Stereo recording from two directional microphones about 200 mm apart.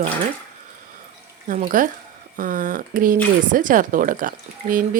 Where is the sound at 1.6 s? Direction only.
40° right (ahead or behind).